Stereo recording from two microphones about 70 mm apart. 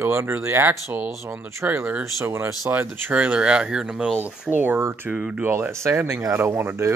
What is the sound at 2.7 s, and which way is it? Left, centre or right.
Speech, right.